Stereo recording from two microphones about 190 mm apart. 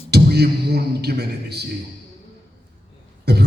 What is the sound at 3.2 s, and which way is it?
Cough, 60° right (ahead or behind).